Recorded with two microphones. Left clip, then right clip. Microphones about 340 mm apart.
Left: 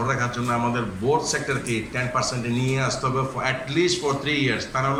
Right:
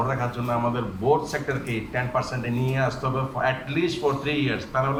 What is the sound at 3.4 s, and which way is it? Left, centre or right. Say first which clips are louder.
A man's voice: even; right.